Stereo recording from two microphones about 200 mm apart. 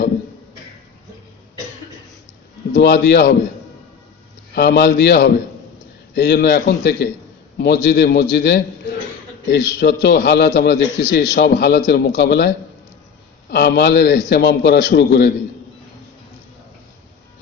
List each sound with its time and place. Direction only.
2.7 s a man's voice: 55° left (ahead or behind)
4.5 s a man's voice: 55° left (ahead or behind)
13.5 s a man's voice: 55° left (ahead or behind)